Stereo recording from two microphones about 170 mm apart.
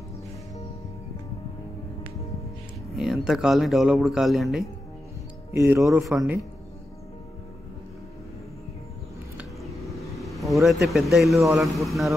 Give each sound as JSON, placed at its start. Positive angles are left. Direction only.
{"t": 3.0, "sound": "speech", "side_deg": 0}
{"t": 5.5, "sound": "speech", "side_deg": -15}
{"t": 6.0, "sound": "speech", "side_deg": -5}
{"t": 9.4, "sound": "a sound", "side_deg": 0}
{"t": 10.1, "sound": "speech", "side_deg": 0}